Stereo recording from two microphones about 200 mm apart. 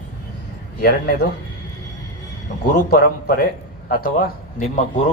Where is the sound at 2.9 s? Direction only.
50° left (ahead or behind).